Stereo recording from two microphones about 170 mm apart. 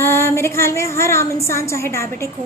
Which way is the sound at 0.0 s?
15° left (ahead or behind).